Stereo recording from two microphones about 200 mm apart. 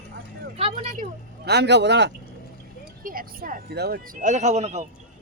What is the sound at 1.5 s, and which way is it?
Speech, 55° right (ahead or behind).